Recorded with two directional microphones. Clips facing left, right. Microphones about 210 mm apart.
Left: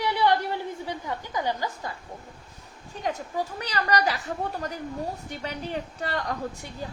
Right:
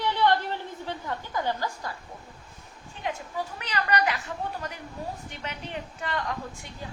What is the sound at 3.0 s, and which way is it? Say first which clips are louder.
A woman's voice: left 3 dB; 40° left (ahead or behind).